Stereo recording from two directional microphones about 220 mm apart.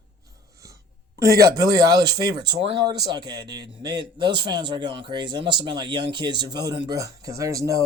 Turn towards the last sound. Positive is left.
turn(degrees=-15)  # may be behind; listen again after turning